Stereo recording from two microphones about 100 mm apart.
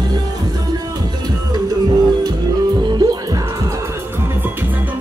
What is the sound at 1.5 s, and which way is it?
Music, 45° right (ahead or behind).